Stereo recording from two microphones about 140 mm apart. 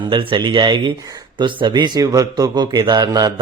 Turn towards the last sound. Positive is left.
turn(degrees=-30)  # may be behind; listen again after turning